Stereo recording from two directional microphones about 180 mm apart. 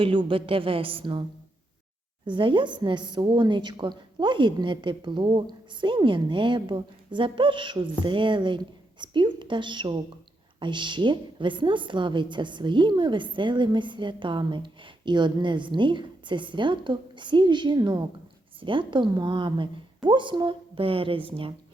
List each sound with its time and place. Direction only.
0.0 s a woman's voice: 30° right (ahead or behind)
2.2 s a woman's voice: 25° right (ahead or behind)